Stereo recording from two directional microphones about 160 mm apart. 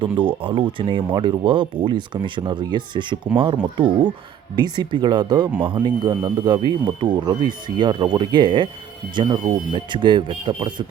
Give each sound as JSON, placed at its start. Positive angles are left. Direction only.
{"t": 0.0, "sound": "speech", "side_deg": -30}